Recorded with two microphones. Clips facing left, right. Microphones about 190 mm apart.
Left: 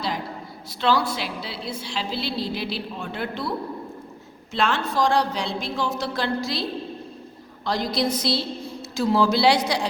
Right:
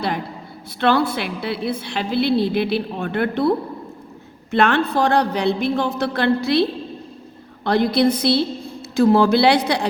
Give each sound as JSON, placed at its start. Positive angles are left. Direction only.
{"t": 0.8, "sound": "a woman's voice", "side_deg": -55}
{"t": 4.5, "sound": "a woman's voice", "side_deg": -60}